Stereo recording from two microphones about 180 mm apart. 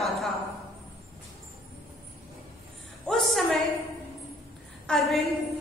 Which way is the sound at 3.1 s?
Centre (ahead or behind).